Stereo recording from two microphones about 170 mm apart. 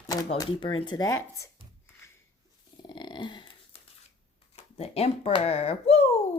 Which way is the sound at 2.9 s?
25° left (ahead or behind).